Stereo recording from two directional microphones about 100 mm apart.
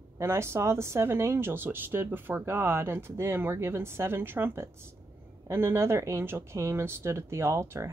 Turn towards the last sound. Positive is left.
turn(degrees=-25)  # may be behind; listen again after turning